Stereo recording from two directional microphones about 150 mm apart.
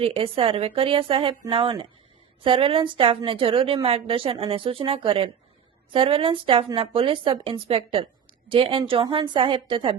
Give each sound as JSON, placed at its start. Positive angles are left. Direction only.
{"t": 0.0, "sound": "a woman's voice", "side_deg": -35}